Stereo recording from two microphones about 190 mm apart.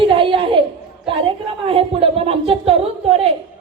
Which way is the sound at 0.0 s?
25° right (ahead or behind).